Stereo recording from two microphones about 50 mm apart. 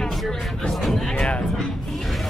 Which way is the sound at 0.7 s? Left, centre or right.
Centre.